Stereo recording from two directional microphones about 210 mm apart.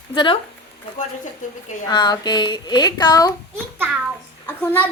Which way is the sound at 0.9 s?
35° left (ahead or behind).